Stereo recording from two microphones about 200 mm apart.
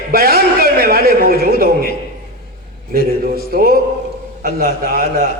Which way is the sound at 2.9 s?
50° right (ahead or behind).